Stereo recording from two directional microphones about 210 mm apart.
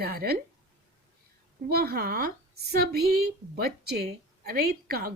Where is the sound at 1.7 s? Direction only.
45° right (ahead or behind).